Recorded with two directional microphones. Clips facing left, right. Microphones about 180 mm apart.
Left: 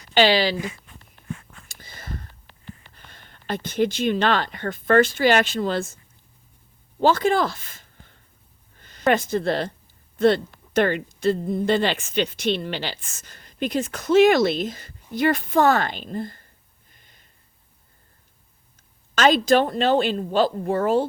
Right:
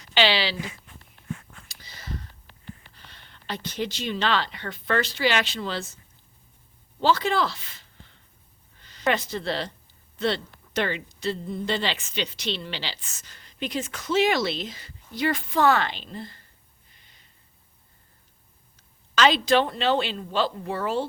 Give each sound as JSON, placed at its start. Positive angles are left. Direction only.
{"t": 0.1, "sound": "speech", "side_deg": 45}
{"t": 1.6, "sound": "whispering", "side_deg": 50}
{"t": 2.9, "sound": "speech", "side_deg": 50}
{"t": 7.0, "sound": "speech", "side_deg": 50}
{"t": 16.9, "sound": "a sound", "side_deg": 50}
{"t": 19.1, "sound": "speech", "side_deg": 45}